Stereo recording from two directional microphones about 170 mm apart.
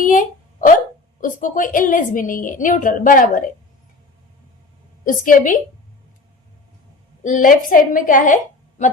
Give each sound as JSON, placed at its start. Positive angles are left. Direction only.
{"t": 0.0, "sound": "a sound", "side_deg": 50}
{"t": 1.2, "sound": "a woman's voice", "side_deg": 50}
{"t": 5.0, "sound": "a woman's voice", "side_deg": 50}
{"t": 7.3, "sound": "a woman's voice", "side_deg": 50}